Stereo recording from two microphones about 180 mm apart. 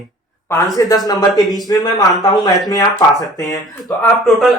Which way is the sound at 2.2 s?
20° left (ahead or behind).